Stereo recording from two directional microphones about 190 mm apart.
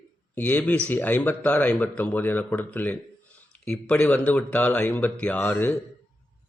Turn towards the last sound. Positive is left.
turn(degrees=10)  # may be behind; listen again after turning